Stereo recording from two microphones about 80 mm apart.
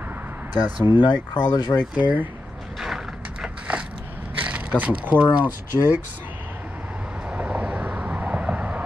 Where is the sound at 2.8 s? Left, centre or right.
Centre.